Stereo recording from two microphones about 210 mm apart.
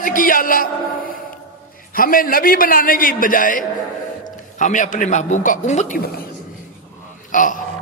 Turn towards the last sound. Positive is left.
turn(degrees=40)  # may be behind; listen again after turning